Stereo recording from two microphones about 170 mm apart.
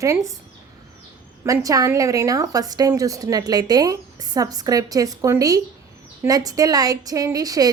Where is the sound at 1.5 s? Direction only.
20° right (ahead or behind).